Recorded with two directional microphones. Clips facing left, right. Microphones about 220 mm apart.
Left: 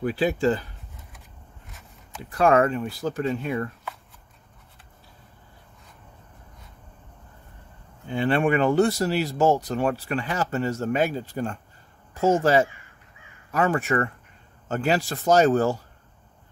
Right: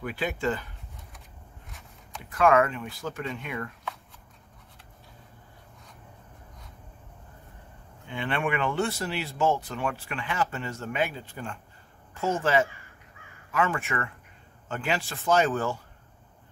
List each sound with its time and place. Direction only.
0.0 s speech: 35° left (ahead or behind)
1.7 s a sound: centre (ahead or behind)
2.2 s speech: 35° left (ahead or behind)
8.1 s speech: 35° left (ahead or behind)